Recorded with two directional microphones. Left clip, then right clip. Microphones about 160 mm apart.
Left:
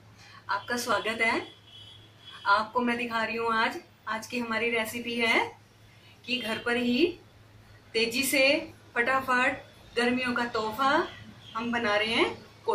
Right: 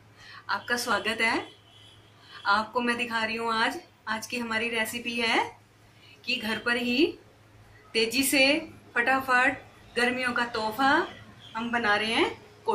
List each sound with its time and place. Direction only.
0.7 s a woman's voice: 20° right (ahead or behind)
2.4 s a woman's voice: 25° right (ahead or behind)